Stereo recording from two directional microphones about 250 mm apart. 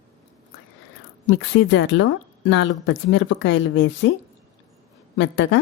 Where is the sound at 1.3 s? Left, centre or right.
Left.